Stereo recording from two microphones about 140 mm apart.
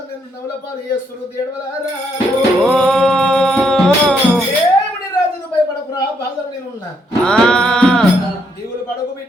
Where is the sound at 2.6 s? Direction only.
5° left (ahead or behind).